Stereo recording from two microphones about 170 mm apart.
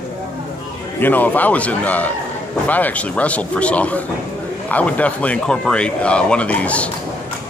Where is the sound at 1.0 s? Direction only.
10° left (ahead or behind).